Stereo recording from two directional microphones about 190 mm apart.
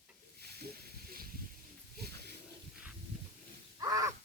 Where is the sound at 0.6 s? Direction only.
55° right (ahead or behind).